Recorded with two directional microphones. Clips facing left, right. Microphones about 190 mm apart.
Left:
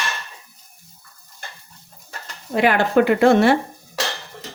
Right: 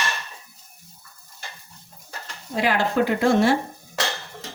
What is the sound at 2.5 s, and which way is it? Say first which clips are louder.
Speech: left 5 dB; 60° left (ahead or behind).